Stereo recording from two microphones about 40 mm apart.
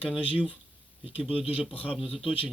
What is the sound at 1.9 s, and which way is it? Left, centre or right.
Speech, centre.